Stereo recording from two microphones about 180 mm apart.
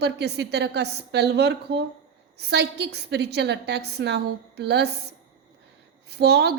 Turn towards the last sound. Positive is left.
turn(degrees=-65)  # may be behind; listen again after turning